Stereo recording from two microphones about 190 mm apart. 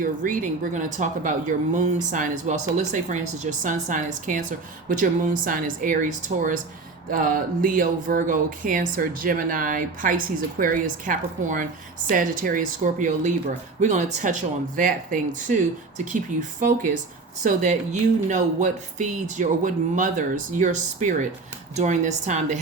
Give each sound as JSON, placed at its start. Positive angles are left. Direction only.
{"t": 0.0, "sound": "speech", "side_deg": -45}